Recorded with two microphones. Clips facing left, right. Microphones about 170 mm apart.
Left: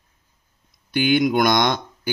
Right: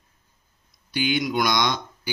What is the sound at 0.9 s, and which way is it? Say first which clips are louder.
Speech: left 6 dB; 55° left (ahead or behind).